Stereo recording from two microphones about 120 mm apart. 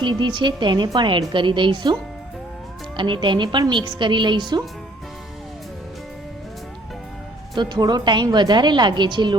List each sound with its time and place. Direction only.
0.0 s a woman's voice: 40° right (ahead or behind)
7.5 s a woman's voice: 35° right (ahead or behind)